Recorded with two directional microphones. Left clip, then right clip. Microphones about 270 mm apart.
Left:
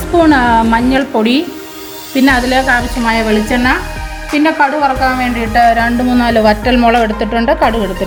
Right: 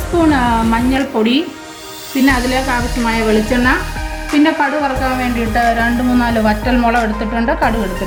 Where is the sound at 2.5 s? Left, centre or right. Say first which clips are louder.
Left 5 dB; left.